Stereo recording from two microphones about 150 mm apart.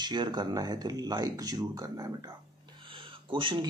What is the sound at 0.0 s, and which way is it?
A man's voice, 30° right (ahead or behind).